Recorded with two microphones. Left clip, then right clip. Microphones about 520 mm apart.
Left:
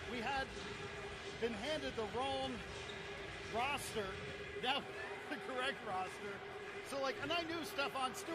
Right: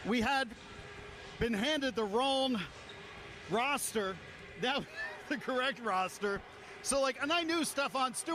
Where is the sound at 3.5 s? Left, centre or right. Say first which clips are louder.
Right 7 dB; right.